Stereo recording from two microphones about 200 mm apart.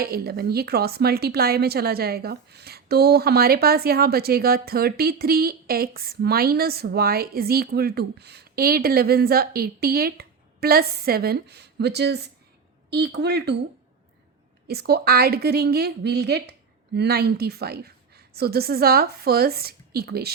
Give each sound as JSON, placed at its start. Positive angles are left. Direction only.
{"t": 0.0, "sound": "a woman's voice", "side_deg": -50}
{"t": 14.7, "sound": "speech", "side_deg": -55}